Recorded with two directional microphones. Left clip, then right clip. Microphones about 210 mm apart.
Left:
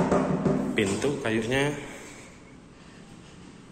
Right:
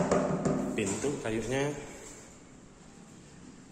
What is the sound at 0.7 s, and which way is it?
A man's voice, 5° right (ahead or behind).